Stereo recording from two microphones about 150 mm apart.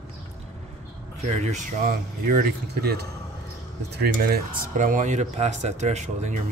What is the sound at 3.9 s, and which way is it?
Speech, 90° right.